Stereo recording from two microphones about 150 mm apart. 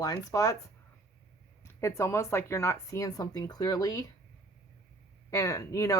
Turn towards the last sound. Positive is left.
turn(degrees=20)  # may be behind; listen again after turning